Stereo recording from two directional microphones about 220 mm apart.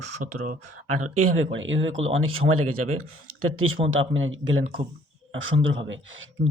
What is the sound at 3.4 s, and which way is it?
Speech, 70° right (ahead or behind).